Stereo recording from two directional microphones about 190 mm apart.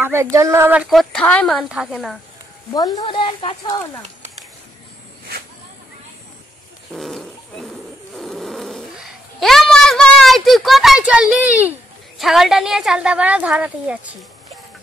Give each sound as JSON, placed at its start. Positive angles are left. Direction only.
{"t": 0.0, "sound": "speech", "side_deg": -10}
{"t": 2.7, "sound": "speech", "side_deg": 20}
{"t": 6.9, "sound": "wild animals", "side_deg": 0}
{"t": 8.2, "sound": "a sound", "side_deg": 0}
{"t": 12.2, "sound": "speech", "side_deg": 0}